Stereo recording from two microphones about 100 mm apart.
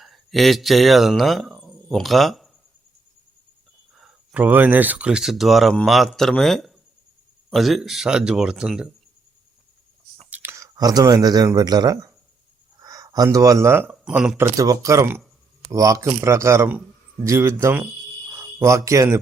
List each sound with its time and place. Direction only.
0.0 s speech: centre (ahead or behind)
3.9 s a sound: centre (ahead or behind)
4.4 s speech: 15° right (ahead or behind)
10.2 s a sound: 15° right (ahead or behind)
10.5 s speech: 35° right (ahead or behind)
12.8 s a sound: 35° right (ahead or behind)
13.7 s speech: 20° right (ahead or behind)
14.1 s speech: 10° right (ahead or behind)
14.3 s speech: 30° right (ahead or behind)